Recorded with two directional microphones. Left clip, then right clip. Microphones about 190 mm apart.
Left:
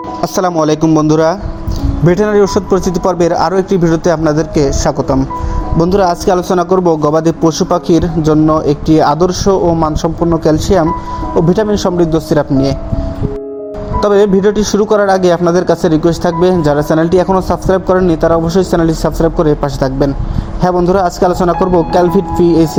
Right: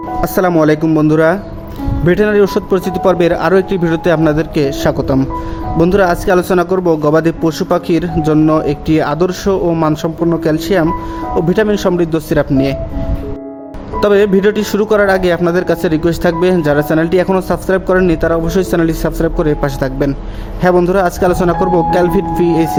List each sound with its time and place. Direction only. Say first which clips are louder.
0.2 s speech: right 1 dB; centre (ahead or behind)
4.4 s speech: left 2 dB; 25° right (ahead or behind)
5.8 s speech: left 1 dB; 5° left (ahead or behind)
14.0 s speech: left 1 dB; 5° right (ahead or behind)
14.6 s speech: left 3 dB; 25° right (ahead or behind)
14.8 s speech: left 1 dB; centre (ahead or behind)